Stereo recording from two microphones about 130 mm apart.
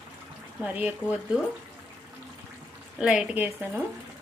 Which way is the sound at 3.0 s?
5° right (ahead or behind).